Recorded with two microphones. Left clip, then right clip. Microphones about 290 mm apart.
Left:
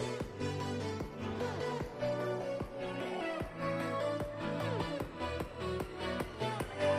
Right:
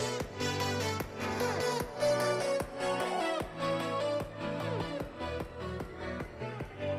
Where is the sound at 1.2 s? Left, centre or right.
Right.